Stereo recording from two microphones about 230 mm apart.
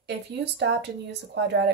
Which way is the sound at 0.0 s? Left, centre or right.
Right.